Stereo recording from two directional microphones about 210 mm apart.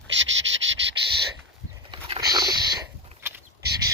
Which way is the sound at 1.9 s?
20° right (ahead or behind).